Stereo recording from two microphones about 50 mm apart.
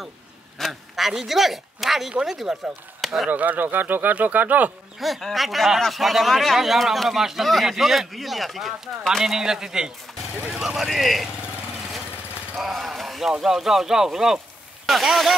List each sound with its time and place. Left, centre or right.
0.6 s speech: centre
3.3 s speech: right
4.9 s speech: centre
12.5 s speech: centre